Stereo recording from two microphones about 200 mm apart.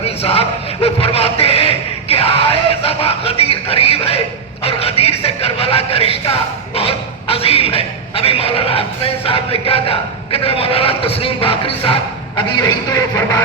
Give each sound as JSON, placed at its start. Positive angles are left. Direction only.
{"t": 0.0, "sound": "a sound", "side_deg": 30}
{"t": 9.2, "sound": "a man's voice", "side_deg": 30}
{"t": 12.5, "sound": "music", "side_deg": 20}